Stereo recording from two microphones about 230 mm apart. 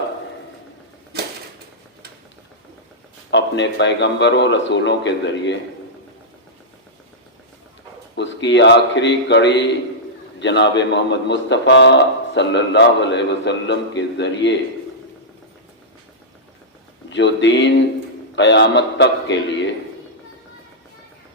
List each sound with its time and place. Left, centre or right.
3.3 s a man's voice: left
8.1 s a man's voice: left
17.1 s a man's voice: left